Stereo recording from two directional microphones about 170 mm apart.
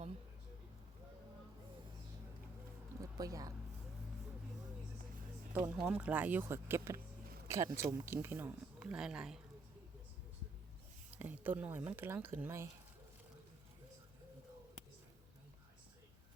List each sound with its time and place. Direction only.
3.0 s music: 20° right (ahead or behind)
5.5 s speech: 10° right (ahead or behind)
7.4 s a sound: 15° right (ahead or behind)
7.9 s speech: 15° right (ahead or behind)
11.1 s speech: 10° right (ahead or behind)